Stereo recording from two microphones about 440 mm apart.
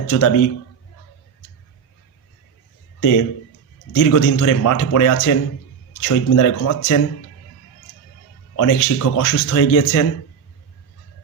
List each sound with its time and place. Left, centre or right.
0.1 s speech: left
3.9 s speech: left
8.5 s speech: left